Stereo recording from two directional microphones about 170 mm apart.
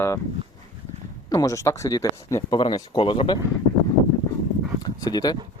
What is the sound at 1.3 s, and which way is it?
Speech, 20° left (ahead or behind).